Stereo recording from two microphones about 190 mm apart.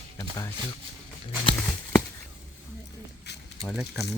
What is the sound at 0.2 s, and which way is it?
Speech, 15° left (ahead or behind).